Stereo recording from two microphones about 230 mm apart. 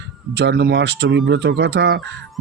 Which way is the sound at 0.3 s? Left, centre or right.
Right.